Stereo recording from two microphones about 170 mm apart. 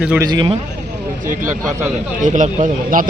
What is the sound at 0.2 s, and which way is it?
Speech, 25° right (ahead or behind).